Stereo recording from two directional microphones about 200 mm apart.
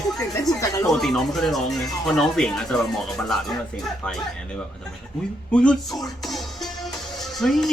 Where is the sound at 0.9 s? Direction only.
Centre (ahead or behind).